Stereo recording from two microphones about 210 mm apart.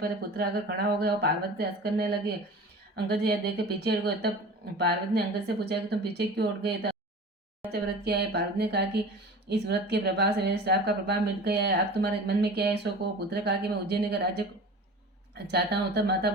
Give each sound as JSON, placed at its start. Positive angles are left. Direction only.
{"t": 0.0, "sound": "a woman's voice", "side_deg": -50}
{"t": 15.4, "sound": "a woman's voice", "side_deg": -50}